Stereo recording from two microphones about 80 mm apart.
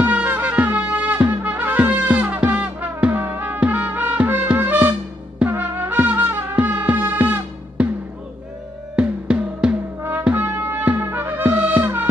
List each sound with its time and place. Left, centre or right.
0.0 s music: centre
8.9 s music: centre
10.3 s music: right